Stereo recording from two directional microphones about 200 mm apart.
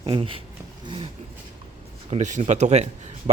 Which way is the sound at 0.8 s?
25° right (ahead or behind).